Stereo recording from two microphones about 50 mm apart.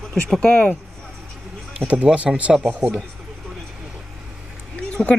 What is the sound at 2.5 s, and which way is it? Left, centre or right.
Speech, centre.